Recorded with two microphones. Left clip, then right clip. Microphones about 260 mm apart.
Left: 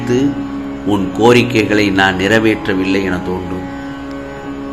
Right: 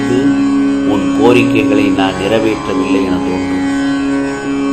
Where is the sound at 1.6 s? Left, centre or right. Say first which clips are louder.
Even; left.